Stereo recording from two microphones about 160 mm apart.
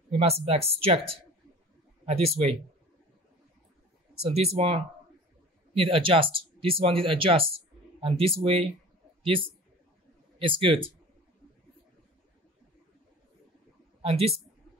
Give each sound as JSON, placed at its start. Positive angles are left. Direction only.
{"t": 0.1, "sound": "speech", "side_deg": -40}
{"t": 4.2, "sound": "a man's voice", "side_deg": -40}
{"t": 14.0, "sound": "speech", "side_deg": -40}